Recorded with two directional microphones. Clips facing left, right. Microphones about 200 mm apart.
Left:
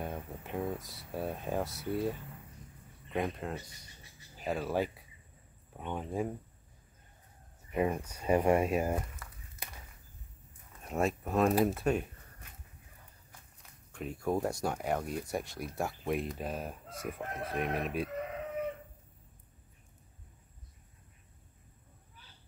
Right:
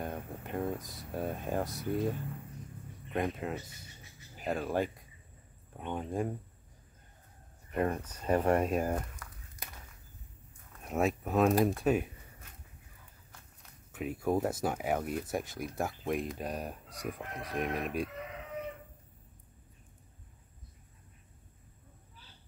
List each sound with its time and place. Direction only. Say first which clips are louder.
0.0 s speech: right 1 dB; centre (ahead or behind)
3.6 s speech: right 3 dB; 25° right (ahead or behind)
4.5 s speech: even; centre (ahead or behind)
7.7 s speech: left 1 dB; 5° left (ahead or behind)
10.8 s speech: right 1 dB; centre (ahead or behind)
13.9 s speech: right 2 dB; 5° right (ahead or behind)